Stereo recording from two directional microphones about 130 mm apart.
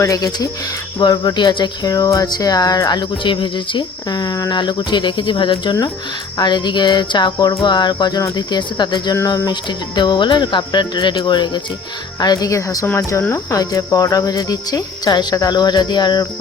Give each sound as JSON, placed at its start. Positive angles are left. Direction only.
{"t": 0.0, "sound": "speech", "side_deg": 25}
{"t": 9.1, "sound": "speech", "side_deg": 25}